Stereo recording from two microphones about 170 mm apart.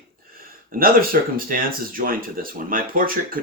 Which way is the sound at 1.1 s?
60° right (ahead or behind).